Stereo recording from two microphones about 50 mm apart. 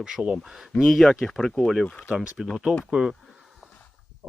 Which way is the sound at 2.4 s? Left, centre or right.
Centre.